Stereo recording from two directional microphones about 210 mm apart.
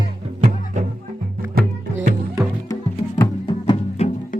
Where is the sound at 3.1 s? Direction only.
20° left (ahead or behind).